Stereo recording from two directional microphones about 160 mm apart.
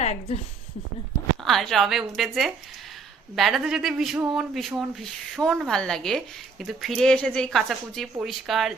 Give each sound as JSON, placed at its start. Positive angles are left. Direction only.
{"t": 0.0, "sound": "a woman's voice", "side_deg": 45}
{"t": 1.5, "sound": "speech", "side_deg": 0}